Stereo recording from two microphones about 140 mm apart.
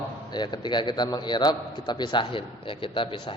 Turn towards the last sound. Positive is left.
turn(degrees=35)  # may be behind; listen again after turning